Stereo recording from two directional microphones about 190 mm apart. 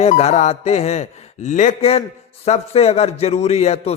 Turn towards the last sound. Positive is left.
turn(degrees=35)  # may be behind; listen again after turning